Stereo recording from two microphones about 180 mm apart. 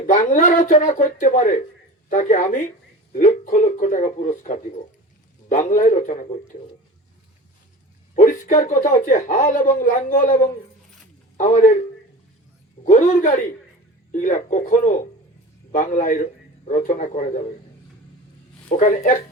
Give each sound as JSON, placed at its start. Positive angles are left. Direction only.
{"t": 0.1, "sound": "a woman's voice", "side_deg": 45}
{"t": 8.1, "sound": "a woman's voice", "side_deg": 45}